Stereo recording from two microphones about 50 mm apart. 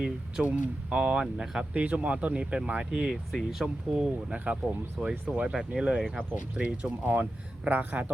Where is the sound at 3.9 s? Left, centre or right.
Centre.